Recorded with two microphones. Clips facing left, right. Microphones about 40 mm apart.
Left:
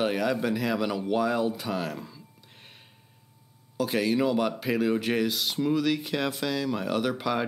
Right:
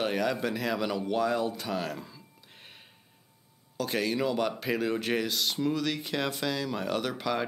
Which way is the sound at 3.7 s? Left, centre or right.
Centre.